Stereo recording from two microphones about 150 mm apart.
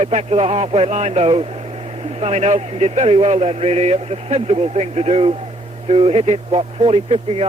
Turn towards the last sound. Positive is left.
turn(degrees=-40)  # may be behind; listen again after turning